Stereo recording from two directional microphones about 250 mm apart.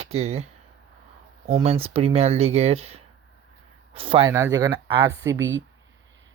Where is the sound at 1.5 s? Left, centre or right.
Right.